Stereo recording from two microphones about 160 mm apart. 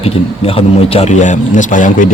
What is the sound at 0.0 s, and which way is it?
A man's voice, 35° left (ahead or behind).